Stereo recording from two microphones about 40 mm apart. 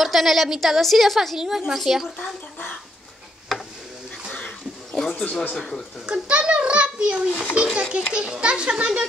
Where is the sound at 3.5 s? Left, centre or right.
Centre.